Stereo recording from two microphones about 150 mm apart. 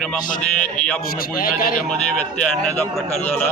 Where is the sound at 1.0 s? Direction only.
75° left (ahead or behind).